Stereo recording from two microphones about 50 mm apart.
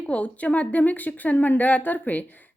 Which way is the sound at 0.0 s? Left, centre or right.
Left.